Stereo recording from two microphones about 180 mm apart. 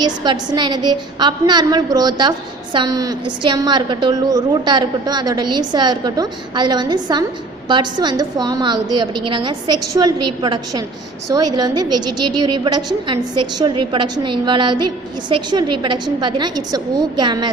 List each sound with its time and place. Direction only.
0.0 s a woman's voice: 25° right (ahead or behind)